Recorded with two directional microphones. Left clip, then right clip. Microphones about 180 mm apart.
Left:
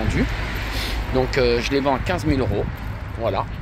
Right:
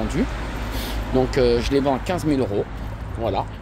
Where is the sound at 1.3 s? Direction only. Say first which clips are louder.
Even; 25° right (ahead or behind).